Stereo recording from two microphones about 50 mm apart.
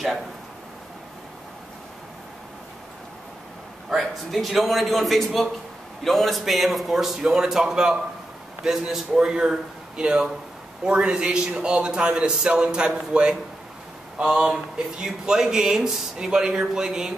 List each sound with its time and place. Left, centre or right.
3.9 s a man's voice: centre